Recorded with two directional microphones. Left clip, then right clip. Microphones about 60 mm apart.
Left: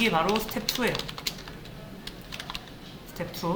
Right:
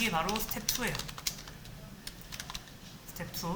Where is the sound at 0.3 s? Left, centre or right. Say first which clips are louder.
Left 7 dB; right.